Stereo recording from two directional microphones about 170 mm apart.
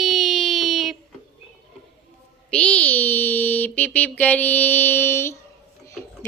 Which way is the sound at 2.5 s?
10° left (ahead or behind).